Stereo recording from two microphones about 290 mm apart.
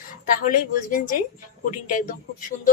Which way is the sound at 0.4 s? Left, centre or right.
Left.